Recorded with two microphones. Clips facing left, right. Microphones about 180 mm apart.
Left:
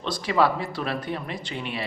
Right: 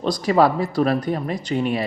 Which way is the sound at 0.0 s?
40° right (ahead or behind).